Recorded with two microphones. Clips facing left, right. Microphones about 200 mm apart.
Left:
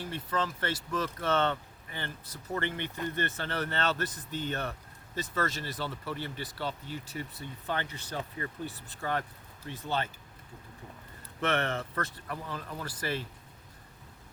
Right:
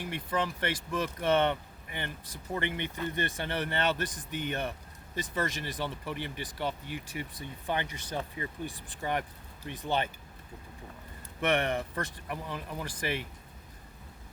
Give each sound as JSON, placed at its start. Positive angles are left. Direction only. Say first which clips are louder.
{"t": 0.0, "sound": "speech", "louder": "right 1 dB", "side_deg": -15}
{"t": 11.3, "sound": "speech", "louder": "right 2 dB", "side_deg": -15}